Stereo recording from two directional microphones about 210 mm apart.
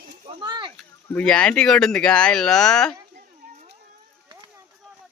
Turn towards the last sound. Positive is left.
turn(degrees=-20)  # may be behind; listen again after turning